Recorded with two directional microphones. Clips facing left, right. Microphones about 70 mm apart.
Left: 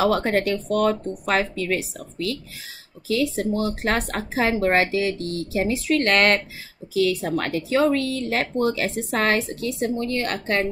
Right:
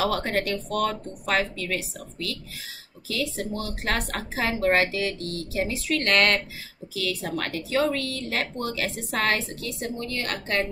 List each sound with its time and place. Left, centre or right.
0.0 s speech: left